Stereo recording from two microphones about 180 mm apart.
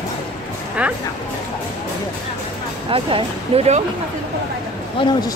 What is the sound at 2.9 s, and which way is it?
Speech, 30° right (ahead or behind).